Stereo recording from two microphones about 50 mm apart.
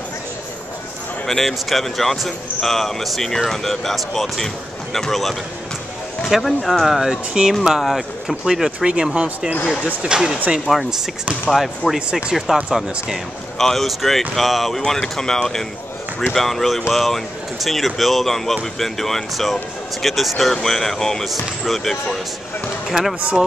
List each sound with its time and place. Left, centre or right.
1.2 s speech: centre
6.9 s speech: centre
10.7 s speech: centre
12.1 s speech: centre
13.6 s speech: centre